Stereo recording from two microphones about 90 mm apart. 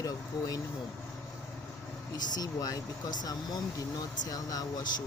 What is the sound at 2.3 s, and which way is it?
Speech, 45° left (ahead or behind).